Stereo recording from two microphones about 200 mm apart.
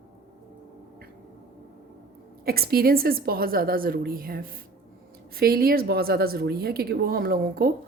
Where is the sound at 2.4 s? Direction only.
50° right (ahead or behind).